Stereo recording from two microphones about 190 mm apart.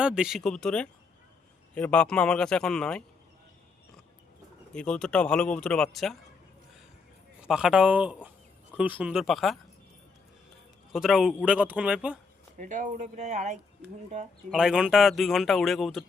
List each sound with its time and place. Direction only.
0.0 s a man's voice: 5° right (ahead or behind)
4.7 s a man's voice: 5° left (ahead or behind)
7.4 s a man's voice: 5° right (ahead or behind)
10.9 s a man's voice: centre (ahead or behind)
12.5 s speech: 40° right (ahead or behind)
14.5 s a man's voice: 5° right (ahead or behind)